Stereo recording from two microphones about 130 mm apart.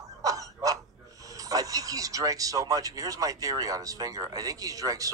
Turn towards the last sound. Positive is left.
turn(degrees=-25)  # may be behind; listen again after turning